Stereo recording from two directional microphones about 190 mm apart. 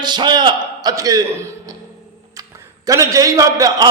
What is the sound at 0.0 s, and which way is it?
A man's voice, 25° right (ahead or behind).